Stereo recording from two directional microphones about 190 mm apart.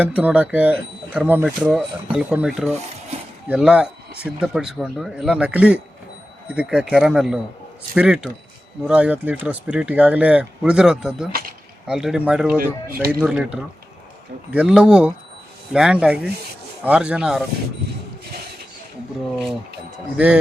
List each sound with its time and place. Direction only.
0.0 s speech: 5° right (ahead or behind)
11.3 s speech: 50° right (ahead or behind)
11.9 s speech: 5° right (ahead or behind)
12.5 s speech: 50° right (ahead or behind)
13.1 s speech: 5° right (ahead or behind)
20.1 s speech: 5° right (ahead or behind)